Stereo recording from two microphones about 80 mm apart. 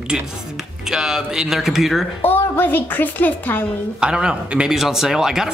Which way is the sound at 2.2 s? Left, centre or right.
Left.